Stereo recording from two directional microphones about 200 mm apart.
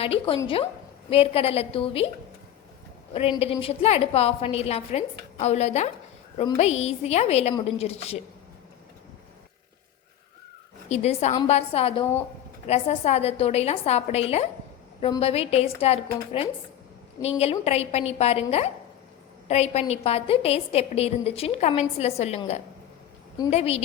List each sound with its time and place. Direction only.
0.0 s a woman's voice: 30° left (ahead or behind)
3.1 s a woman's voice: 30° left (ahead or behind)
10.8 s a woman's voice: 35° left (ahead or behind)
23.5 s a woman's voice: 30° left (ahead or behind)